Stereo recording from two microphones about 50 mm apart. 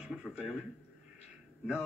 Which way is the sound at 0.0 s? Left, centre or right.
Centre.